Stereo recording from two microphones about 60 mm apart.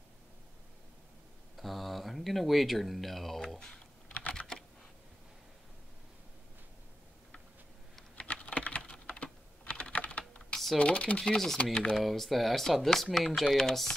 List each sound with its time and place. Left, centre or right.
1.6 s a sound: centre
4.1 s typing: left
8.2 s typing: left
10.5 s typing: centre
10.8 s speech: centre
12.0 s speech: centre